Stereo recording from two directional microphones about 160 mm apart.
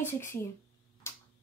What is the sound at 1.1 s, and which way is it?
Tick-tock, 15° left (ahead or behind).